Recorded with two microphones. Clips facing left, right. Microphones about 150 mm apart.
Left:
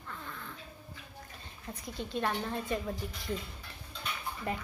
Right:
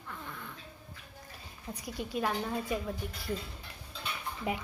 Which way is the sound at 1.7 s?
10° right (ahead or behind).